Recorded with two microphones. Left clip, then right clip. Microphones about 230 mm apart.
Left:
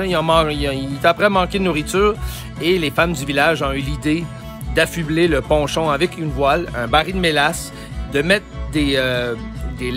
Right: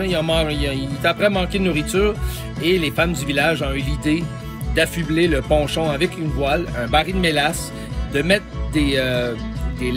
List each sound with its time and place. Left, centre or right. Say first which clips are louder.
0.0 s speech: left 4 dB; centre